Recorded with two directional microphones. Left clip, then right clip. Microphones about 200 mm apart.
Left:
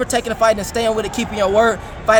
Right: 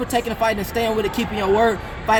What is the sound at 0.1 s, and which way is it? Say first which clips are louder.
Speech: left 4 dB; 20° left (ahead or behind).